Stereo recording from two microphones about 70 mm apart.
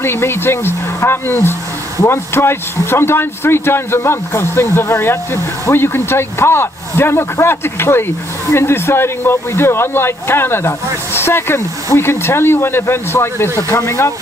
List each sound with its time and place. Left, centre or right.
0.0 s speech: left